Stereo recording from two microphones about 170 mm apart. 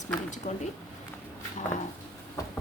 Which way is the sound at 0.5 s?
50° left (ahead or behind).